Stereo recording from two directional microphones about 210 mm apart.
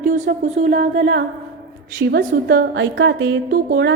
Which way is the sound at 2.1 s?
50° right (ahead or behind).